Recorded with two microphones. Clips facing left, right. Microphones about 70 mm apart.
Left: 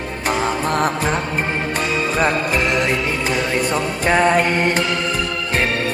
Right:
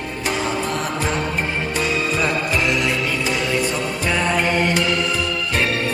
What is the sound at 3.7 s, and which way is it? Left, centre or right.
Music, left.